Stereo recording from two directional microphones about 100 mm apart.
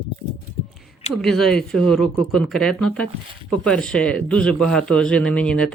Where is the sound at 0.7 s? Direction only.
Centre (ahead or behind).